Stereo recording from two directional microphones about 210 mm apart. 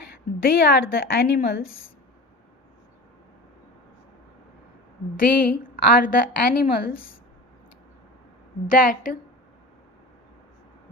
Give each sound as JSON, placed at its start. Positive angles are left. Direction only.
{"t": 0.1, "sound": "a woman's voice", "side_deg": 45}
{"t": 5.1, "sound": "a woman's voice", "side_deg": 40}
{"t": 8.8, "sound": "a woman's voice", "side_deg": 40}